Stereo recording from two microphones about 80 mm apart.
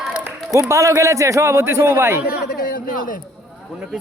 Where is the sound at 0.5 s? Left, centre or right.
Right.